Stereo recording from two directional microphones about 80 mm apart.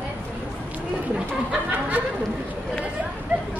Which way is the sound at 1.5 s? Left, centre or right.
Centre.